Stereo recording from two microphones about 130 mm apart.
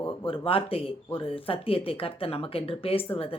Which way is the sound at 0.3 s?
45° left (ahead or behind).